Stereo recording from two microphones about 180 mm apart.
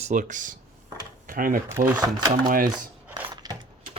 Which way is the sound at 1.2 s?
50° right (ahead or behind).